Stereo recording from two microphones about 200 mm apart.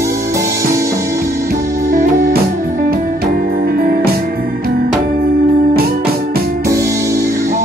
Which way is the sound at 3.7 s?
50° right (ahead or behind).